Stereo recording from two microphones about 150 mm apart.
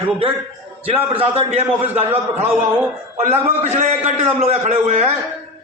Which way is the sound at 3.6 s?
50° right (ahead or behind).